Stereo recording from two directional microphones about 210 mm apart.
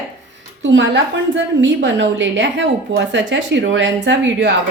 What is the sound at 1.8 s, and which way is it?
Speech, 60° right (ahead or behind).